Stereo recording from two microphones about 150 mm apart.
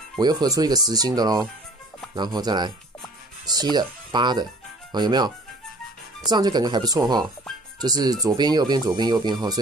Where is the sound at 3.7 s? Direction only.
30° right (ahead or behind).